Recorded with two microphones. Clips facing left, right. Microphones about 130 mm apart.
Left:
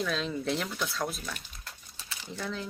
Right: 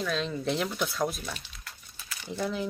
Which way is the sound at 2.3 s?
15° right (ahead or behind).